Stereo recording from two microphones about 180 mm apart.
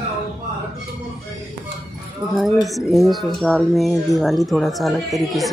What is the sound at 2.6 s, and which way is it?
Speech, centre (ahead or behind).